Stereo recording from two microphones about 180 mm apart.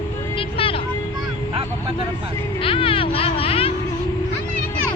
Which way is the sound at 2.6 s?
30° left (ahead or behind).